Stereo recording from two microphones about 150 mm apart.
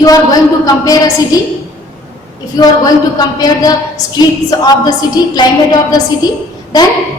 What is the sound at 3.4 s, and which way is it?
A woman's voice, 25° left (ahead or behind).